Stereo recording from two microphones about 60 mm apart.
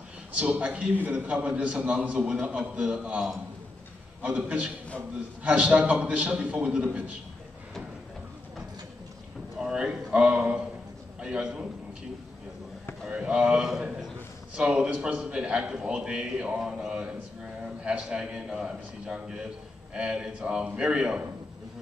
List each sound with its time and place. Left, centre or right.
0.4 s a man's voice: centre
9.6 s a man's voice: centre
13.1 s a man's voice: centre